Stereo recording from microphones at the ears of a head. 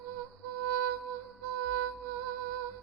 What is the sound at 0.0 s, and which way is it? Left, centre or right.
Music, right.